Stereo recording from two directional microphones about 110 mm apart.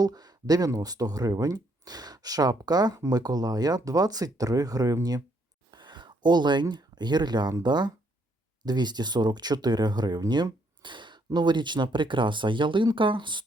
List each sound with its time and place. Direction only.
0.0 s speech: 35° right (ahead or behind)
5.7 s speech: 45° right (ahead or behind)